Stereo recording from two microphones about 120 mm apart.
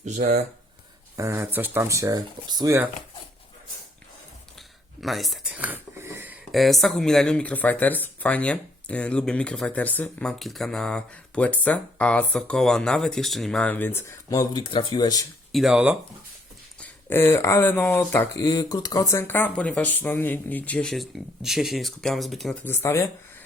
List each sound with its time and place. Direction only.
0.0 s speech: 75° right (ahead or behind)
1.1 s speech: 25° right (ahead or behind)
2.1 s speech: 35° right (ahead or behind)
4.9 s a sound: centre (ahead or behind); by 6.4 s 15° right (ahead or behind)
6.5 s speech: centre (ahead or behind); by 14.6 s 30° left (ahead or behind)
14.6 s speech: 45° left (ahead or behind)
15.5 s speech: 5° right (ahead or behind)
16.8 s speech: 20° left (ahead or behind)
18.4 s speech: 35° left (ahead or behind); by 20.9 s 10° left (ahead or behind)
20.9 s speech: centre (ahead or behind)
22.6 s speech: 20° left (ahead or behind)